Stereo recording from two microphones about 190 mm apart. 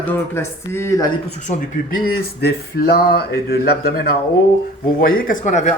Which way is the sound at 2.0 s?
55° left (ahead or behind).